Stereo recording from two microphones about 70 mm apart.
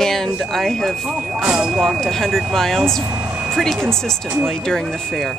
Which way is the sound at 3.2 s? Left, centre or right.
Right.